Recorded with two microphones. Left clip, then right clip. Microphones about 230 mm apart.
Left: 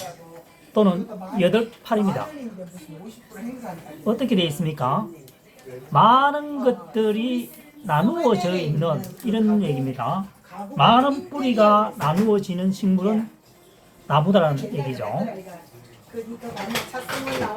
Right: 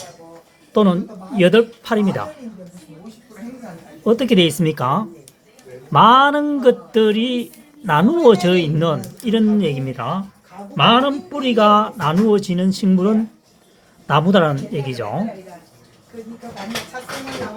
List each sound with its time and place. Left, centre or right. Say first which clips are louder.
0.7 s speech: right 4 dB; right
4.0 s speech: right 8 dB; right